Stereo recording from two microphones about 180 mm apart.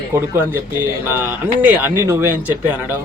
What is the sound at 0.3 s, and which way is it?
A man's voice, 10° right (ahead or behind).